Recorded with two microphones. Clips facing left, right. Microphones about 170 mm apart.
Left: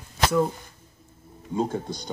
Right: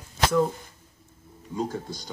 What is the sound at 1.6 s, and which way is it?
Speech, 25° left (ahead or behind).